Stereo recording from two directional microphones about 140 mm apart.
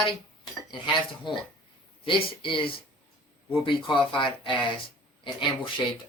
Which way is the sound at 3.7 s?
35° left (ahead or behind).